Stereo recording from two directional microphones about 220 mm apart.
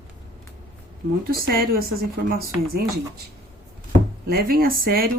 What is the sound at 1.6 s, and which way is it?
Speech, 45° right (ahead or behind).